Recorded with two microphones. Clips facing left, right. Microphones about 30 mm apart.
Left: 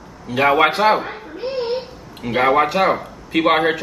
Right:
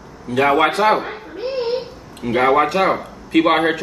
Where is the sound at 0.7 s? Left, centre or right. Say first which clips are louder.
Even; centre.